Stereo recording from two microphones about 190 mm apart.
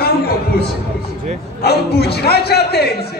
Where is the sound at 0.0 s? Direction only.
55° left (ahead or behind).